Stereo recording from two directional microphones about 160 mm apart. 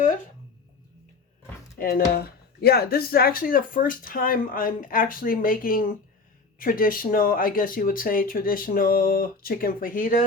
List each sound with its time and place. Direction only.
1.8 s speech: 70° left (ahead or behind); by 10.2 s 55° left (ahead or behind)